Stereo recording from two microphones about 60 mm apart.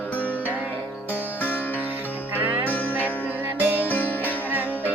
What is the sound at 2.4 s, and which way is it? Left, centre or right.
Music, right.